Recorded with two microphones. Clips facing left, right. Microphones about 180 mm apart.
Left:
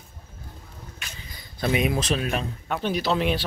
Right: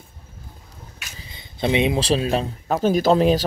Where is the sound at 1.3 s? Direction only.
25° right (ahead or behind).